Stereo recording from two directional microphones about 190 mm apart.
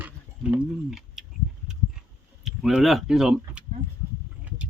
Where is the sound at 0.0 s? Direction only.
5° right (ahead or behind).